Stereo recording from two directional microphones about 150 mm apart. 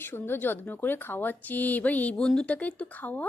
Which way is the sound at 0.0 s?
15° left (ahead or behind).